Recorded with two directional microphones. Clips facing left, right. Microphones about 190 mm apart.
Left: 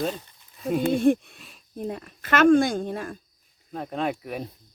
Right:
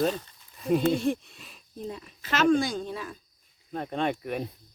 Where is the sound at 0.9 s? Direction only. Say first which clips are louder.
Left 6 dB; 55° left (ahead or behind).